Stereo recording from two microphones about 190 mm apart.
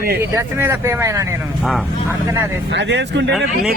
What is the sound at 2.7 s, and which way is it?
Speech, 65° right (ahead or behind).